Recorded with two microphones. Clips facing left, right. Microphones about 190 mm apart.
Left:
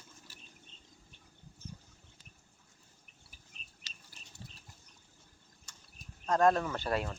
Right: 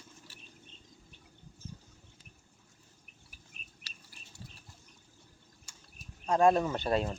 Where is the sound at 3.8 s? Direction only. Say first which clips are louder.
Right 1 dB; 20° left (ahead or behind).